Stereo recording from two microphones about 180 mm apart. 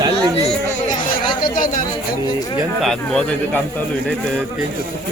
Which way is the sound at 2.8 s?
5° left (ahead or behind).